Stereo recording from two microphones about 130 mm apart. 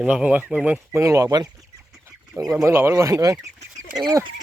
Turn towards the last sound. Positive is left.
turn(degrees=-30)  # may be behind; listen again after turning